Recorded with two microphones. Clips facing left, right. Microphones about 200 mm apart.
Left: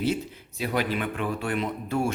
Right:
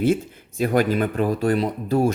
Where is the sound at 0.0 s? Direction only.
50° right (ahead or behind).